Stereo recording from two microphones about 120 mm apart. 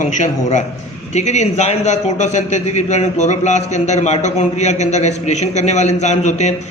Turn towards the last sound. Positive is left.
turn(degrees=70)  # may be behind; listen again after turning